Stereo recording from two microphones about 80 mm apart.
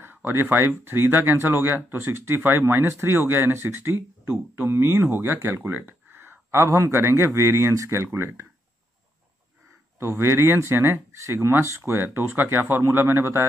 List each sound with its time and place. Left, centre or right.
0.0 s speech: right
9.9 s speech: right
12.0 s speech: right